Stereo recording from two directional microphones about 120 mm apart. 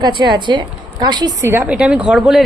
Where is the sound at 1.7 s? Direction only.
10° right (ahead or behind).